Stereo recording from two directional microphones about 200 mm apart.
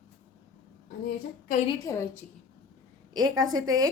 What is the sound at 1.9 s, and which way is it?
Speech, 20° left (ahead or behind).